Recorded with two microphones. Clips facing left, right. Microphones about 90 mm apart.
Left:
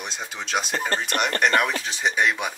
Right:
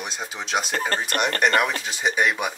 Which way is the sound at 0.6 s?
45° right (ahead or behind).